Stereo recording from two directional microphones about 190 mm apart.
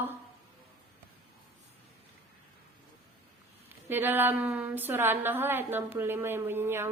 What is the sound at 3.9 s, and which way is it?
A woman's voice, 10° right (ahead or behind).